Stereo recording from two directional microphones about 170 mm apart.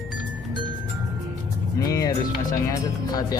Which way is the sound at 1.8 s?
20° left (ahead or behind).